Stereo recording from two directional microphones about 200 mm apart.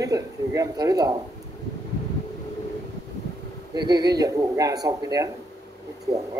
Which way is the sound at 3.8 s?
20° right (ahead or behind).